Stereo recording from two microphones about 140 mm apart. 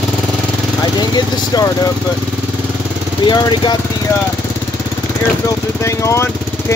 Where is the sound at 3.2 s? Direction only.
30° left (ahead or behind).